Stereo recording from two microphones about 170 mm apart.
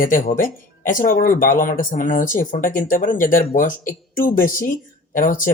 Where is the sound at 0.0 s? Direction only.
55° left (ahead or behind).